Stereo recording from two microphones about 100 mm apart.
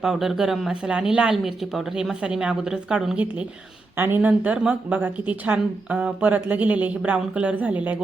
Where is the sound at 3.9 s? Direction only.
20° right (ahead or behind).